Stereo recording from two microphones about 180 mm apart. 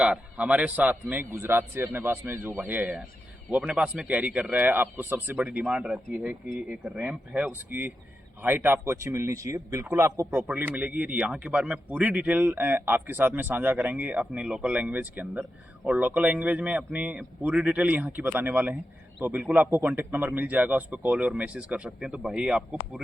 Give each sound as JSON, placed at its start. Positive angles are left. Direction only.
{"t": 0.0, "sound": "speech", "side_deg": -5}